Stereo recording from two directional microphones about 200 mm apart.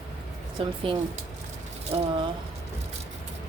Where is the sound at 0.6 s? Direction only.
25° right (ahead or behind).